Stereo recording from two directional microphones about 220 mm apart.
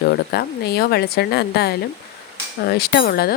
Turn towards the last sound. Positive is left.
turn(degrees=45)  # may be behind; listen again after turning